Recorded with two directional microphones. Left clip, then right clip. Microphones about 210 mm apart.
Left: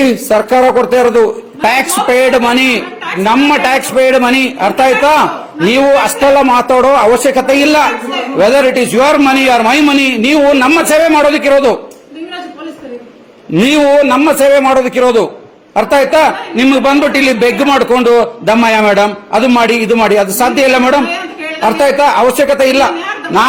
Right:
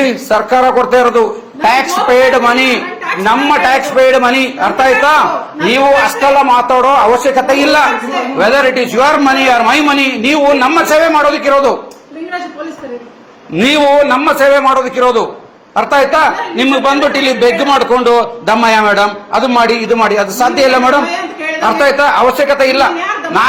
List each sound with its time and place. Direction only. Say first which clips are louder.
0.0 s a man's voice: left 1 dB; 50° left (ahead or behind)
13.6 s a man's voice: even; 60° left (ahead or behind)